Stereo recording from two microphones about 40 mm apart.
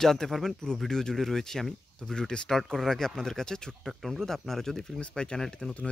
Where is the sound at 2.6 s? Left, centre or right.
Centre.